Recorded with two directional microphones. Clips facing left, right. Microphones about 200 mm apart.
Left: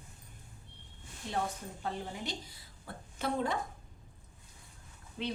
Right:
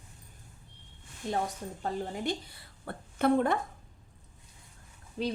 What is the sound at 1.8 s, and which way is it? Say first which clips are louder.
A woman's voice: right 5 dB; 55° right (ahead or behind).